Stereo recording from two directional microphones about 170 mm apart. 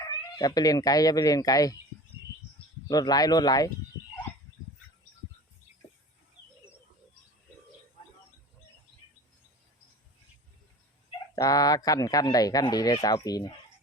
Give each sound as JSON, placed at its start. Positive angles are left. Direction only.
{"t": 0.3, "sound": "a man's voice", "side_deg": 25}
{"t": 2.9, "sound": "a man's voice", "side_deg": 25}
{"t": 11.3, "sound": "a man's voice", "side_deg": 20}